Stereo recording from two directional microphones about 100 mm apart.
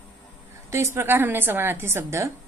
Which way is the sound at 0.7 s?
25° right (ahead or behind).